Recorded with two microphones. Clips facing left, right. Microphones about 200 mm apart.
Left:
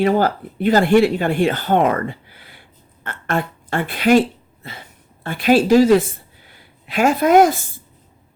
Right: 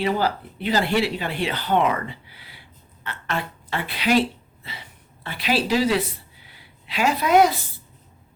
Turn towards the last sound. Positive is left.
turn(degrees=50)  # may be behind; listen again after turning